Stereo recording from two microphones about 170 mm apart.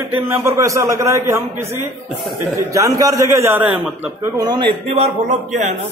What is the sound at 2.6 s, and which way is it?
A man's voice, 20° right (ahead or behind).